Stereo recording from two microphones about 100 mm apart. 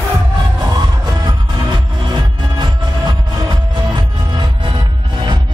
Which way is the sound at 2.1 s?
45° right (ahead or behind).